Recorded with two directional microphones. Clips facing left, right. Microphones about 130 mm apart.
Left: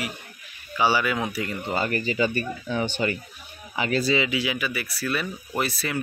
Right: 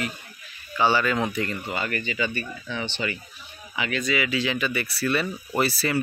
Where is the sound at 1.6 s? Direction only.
30° left (ahead or behind).